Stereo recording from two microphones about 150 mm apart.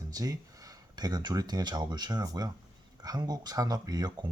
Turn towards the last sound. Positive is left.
turn(degrees=-25)  # may be behind; listen again after turning